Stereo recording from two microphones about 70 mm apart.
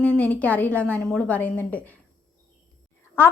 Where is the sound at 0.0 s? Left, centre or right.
Centre.